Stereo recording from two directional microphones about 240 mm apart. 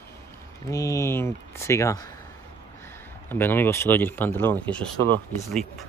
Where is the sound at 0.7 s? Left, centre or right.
Centre.